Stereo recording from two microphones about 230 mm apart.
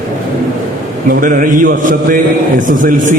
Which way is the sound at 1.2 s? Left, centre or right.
Right.